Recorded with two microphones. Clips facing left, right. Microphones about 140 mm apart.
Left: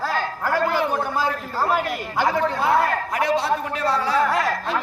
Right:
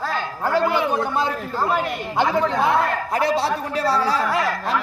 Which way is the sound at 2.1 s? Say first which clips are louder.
Right 2 dB; 25° right (ahead or behind).